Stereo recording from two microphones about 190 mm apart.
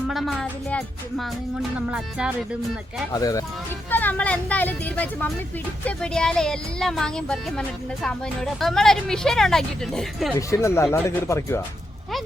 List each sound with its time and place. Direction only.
0.1 s speech: centre (ahead or behind)
1.9 s speech: 5° right (ahead or behind)
3.1 s speech: 20° left (ahead or behind)
8.6 s speech: centre (ahead or behind)
10.3 s speech: 15° left (ahead or behind)